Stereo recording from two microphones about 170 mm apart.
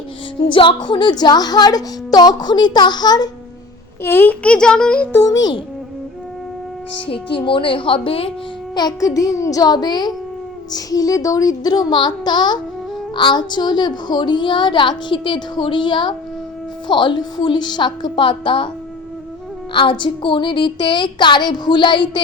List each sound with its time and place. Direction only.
0.5 s a woman's voice: 30° left (ahead or behind)
4.0 s a child's voice: 15° left (ahead or behind)
7.1 s a woman's voice: 30° left (ahead or behind)
19.7 s a woman's voice: 30° left (ahead or behind)